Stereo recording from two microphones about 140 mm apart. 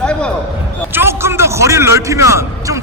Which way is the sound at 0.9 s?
15° right (ahead or behind).